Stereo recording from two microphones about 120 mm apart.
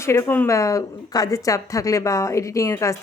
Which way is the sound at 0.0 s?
25° left (ahead or behind).